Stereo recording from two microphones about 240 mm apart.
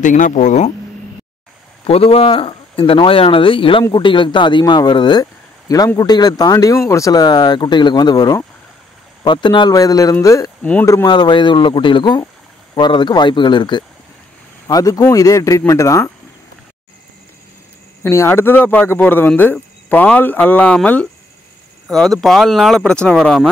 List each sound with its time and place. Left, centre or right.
0.0 s speech: left
1.9 s speech: left
18.0 s speech: centre